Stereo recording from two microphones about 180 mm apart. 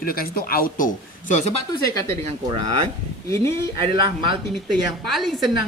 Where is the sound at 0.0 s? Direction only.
55° left (ahead or behind).